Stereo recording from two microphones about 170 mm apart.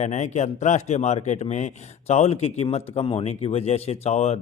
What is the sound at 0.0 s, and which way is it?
Speech, 40° left (ahead or behind).